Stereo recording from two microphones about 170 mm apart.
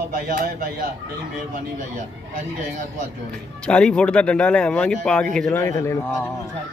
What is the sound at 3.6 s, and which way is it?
Speech, 5° left (ahead or behind).